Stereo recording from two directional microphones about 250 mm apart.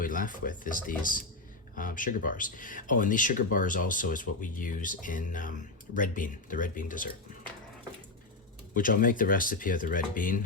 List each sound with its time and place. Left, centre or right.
0.0 s speech: left
8.7 s speech: left